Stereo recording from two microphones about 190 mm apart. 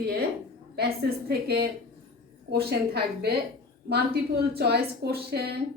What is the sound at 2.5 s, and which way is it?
A woman's voice, 55° right (ahead or behind).